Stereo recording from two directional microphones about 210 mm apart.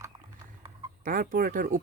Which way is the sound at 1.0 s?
40° right (ahead or behind).